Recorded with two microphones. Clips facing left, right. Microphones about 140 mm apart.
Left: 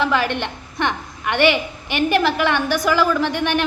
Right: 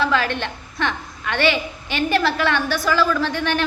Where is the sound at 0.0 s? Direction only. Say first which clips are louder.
Left 1 dB; 15° left (ahead or behind).